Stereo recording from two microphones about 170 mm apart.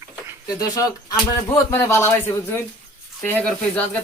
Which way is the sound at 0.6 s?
20° left (ahead or behind).